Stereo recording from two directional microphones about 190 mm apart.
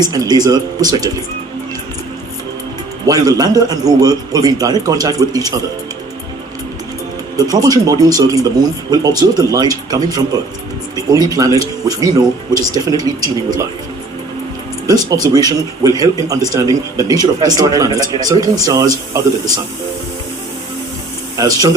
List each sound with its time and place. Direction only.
0.0 s speech: 20° right (ahead or behind)
3.1 s speech: 20° right (ahead or behind)
7.3 s speech: 20° right (ahead or behind)
14.8 s speech: 20° right (ahead or behind)
21.3 s speech: 20° right (ahead or behind)